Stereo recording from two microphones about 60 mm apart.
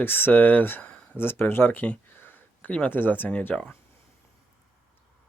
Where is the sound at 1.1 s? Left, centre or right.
Left.